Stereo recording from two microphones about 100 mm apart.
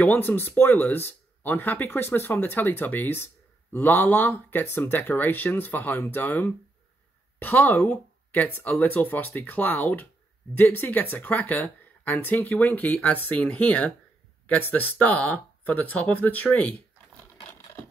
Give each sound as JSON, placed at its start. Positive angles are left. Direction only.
{"t": 0.0, "sound": "speech", "side_deg": 15}